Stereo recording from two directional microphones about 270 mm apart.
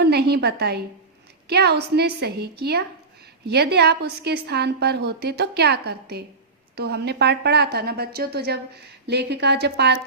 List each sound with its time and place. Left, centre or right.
0.0 s a woman's voice: right